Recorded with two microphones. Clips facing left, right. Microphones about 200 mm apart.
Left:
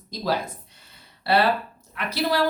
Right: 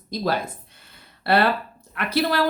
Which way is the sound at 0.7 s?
55° right (ahead or behind).